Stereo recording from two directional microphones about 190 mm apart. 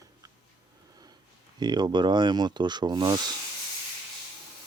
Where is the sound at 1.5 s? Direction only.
20° right (ahead or behind).